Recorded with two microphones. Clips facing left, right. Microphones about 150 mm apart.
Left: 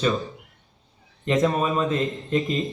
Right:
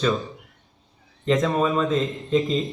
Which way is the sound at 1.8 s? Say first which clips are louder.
Right 1 dB; centre (ahead or behind).